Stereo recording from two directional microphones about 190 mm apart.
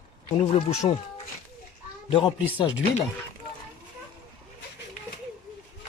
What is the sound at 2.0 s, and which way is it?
Speech, 30° left (ahead or behind).